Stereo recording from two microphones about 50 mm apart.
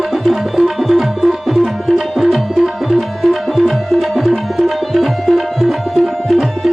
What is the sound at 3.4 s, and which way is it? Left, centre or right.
Tabla, centre.